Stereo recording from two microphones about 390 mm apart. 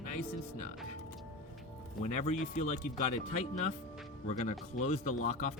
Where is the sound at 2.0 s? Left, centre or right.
Centre.